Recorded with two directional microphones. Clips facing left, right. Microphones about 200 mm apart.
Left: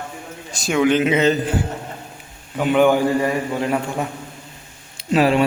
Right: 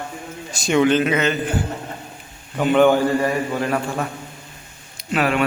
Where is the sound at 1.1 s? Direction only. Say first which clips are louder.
Left 3 dB; 30° left (ahead or behind).